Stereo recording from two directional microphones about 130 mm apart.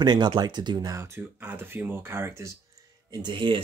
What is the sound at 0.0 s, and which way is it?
Speech, 35° right (ahead or behind).